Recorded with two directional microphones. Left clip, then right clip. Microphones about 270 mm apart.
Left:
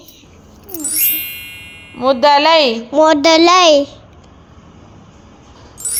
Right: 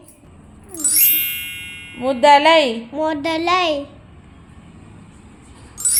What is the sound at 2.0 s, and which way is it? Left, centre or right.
Speech, centre.